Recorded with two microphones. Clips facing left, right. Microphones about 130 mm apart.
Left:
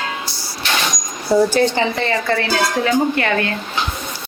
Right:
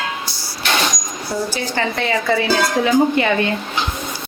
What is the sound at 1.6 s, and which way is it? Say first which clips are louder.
Speech: left 4 dB; 20° left (ahead or behind).